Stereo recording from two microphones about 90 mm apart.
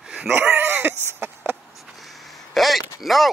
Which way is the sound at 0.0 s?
5° right (ahead or behind).